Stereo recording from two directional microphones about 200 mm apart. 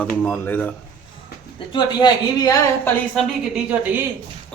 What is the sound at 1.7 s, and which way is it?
Speech, 20° left (ahead or behind).